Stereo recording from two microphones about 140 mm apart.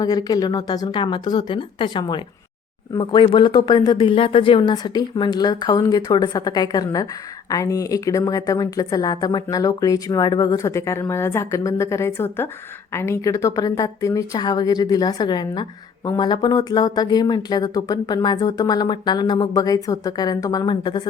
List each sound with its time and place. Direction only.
0.0 s speech: 30° left (ahead or behind)